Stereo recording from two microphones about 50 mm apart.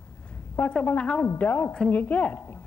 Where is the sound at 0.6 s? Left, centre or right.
Left.